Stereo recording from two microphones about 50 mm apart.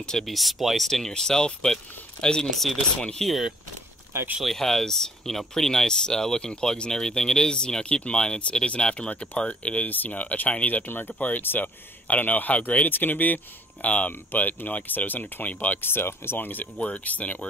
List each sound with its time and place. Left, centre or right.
0.3 s speech: centre
2.5 s speech: centre
3.0 s speech: centre
4.4 s speech: centre; by 15.8 s left
15.8 s speech: left
16.7 s speech: left